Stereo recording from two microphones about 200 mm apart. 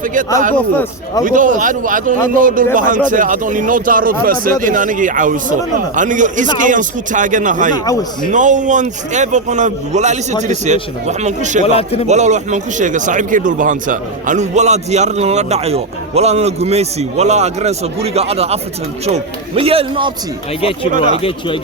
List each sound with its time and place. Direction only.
0.0 s speech: 40° right (ahead or behind)
0.5 s a man's voice: 10° left (ahead or behind)
1.2 s speech: 40° right (ahead or behind)
11.6 s speech: 30° left (ahead or behind)
12.0 s a man's voice: 35° right (ahead or behind)
20.6 s speech: 30° left (ahead or behind)